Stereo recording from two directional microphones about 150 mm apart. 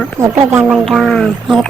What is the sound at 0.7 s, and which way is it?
Speech, centre (ahead or behind).